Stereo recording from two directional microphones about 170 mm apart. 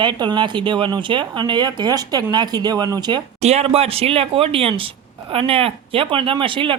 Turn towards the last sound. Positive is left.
turn(degrees=-30)  # may be behind; listen again after turning